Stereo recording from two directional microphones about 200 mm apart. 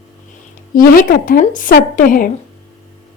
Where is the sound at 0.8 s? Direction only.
45° left (ahead or behind).